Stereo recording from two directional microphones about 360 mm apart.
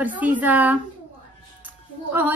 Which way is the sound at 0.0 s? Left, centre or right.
Centre.